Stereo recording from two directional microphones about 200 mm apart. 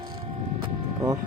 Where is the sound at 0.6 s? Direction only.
25° right (ahead or behind).